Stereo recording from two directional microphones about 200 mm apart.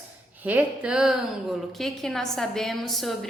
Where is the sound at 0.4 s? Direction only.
5° right (ahead or behind).